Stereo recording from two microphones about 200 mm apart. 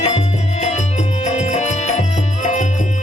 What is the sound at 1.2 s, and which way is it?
Music, 35° left (ahead or behind).